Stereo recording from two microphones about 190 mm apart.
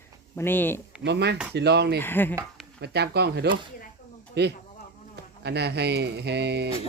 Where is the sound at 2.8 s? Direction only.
60° right (ahead or behind).